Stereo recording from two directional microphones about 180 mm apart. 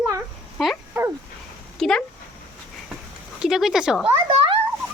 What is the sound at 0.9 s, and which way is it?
Dog, 15° right (ahead or behind).